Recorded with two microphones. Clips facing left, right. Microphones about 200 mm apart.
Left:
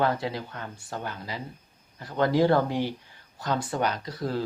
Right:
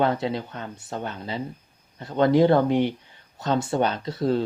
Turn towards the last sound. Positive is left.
turn(degrees=-25)  # may be behind; listen again after turning